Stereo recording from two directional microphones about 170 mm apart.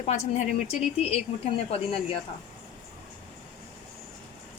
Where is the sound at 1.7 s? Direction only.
35° left (ahead or behind).